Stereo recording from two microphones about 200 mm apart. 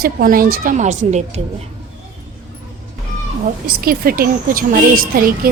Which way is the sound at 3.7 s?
50° right (ahead or behind).